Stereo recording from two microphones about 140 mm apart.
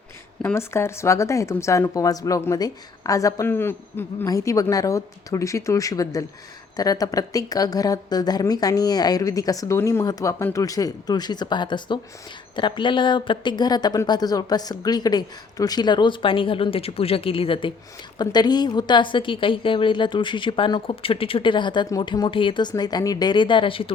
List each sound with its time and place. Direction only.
0.4 s a woman's voice: 20° left (ahead or behind); by 23.9 s 40° left (ahead or behind)